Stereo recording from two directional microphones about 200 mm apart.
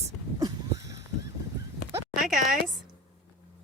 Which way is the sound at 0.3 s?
15° right (ahead or behind).